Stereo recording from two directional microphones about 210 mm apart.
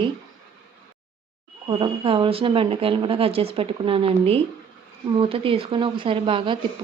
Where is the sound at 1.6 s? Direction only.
25° right (ahead or behind).